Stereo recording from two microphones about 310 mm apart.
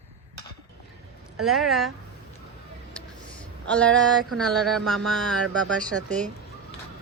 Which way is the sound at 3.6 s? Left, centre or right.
Centre.